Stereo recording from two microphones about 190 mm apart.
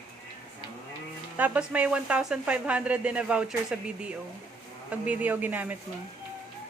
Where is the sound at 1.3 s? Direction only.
10° right (ahead or behind).